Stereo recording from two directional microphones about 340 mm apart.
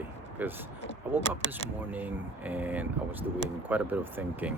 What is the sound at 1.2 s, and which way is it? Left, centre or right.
Speech, centre.